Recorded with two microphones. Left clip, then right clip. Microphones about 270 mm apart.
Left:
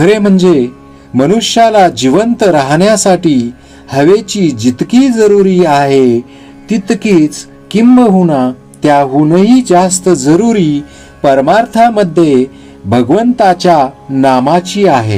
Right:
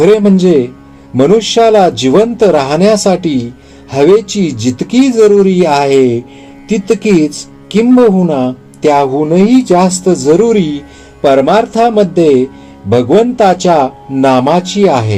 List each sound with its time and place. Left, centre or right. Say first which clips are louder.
0.0 s speech: right 1 dB; left